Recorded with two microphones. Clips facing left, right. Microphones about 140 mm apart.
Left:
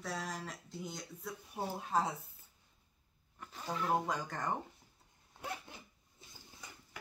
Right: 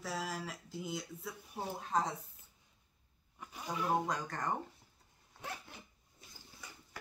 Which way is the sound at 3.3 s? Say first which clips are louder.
Even; 10° right (ahead or behind).